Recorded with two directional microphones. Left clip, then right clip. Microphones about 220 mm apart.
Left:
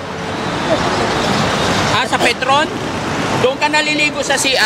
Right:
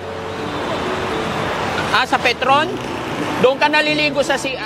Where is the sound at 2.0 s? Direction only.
55° right (ahead or behind).